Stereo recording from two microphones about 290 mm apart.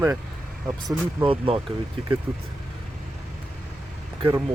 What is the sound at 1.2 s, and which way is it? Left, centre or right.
Speech, centre.